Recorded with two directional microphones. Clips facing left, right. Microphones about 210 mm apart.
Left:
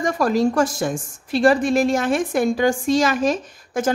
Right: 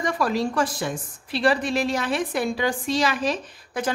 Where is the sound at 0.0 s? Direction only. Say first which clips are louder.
Left 5 dB; 45° left (ahead or behind).